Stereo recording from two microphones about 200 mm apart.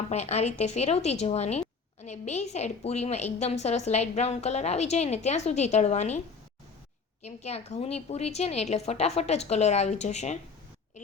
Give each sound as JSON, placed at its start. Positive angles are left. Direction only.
{"t": 0.1, "sound": "a woman's voice", "side_deg": 35}